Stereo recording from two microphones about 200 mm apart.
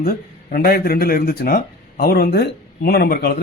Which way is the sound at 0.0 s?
50° left (ahead or behind).